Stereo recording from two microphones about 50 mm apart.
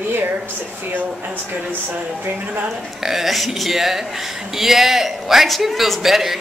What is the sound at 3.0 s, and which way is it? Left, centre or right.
A man's voice, centre.